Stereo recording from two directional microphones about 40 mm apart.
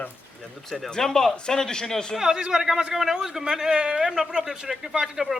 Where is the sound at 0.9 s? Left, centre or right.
Centre.